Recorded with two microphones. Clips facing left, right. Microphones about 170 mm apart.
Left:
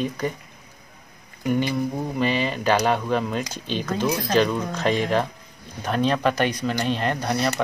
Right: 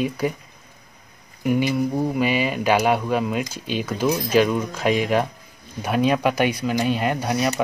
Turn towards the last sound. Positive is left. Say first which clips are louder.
# right 2 dB
turn(degrees=-10)  # may be behind; listen again after turning